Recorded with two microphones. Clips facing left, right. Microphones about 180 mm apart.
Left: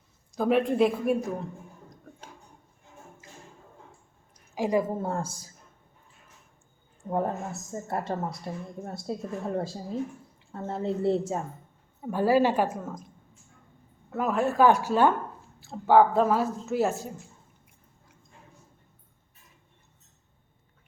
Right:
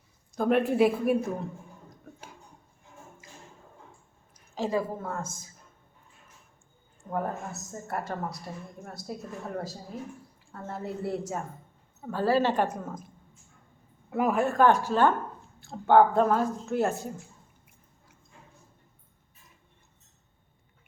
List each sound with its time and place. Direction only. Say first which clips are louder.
0.3 s speech: even; centre (ahead or behind)
4.5 s a woman's voice: left 3 dB; 15° left (ahead or behind)
4.9 s a woman's voice: left 4 dB; 30° left (ahead or behind)
7.1 s a woman's voice: left 3 dB; 25° left (ahead or behind)
11.9 s a woman's voice: left 3 dB; 10° left (ahead or behind)
14.1 s speech: right 2 dB; 10° right (ahead or behind)
14.4 s a woman's voice: left 3 dB; 5° left (ahead or behind)